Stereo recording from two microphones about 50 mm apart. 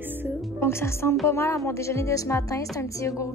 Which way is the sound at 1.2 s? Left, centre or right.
Left.